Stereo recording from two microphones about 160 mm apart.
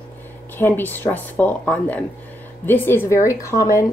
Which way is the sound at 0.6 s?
15° left (ahead or behind).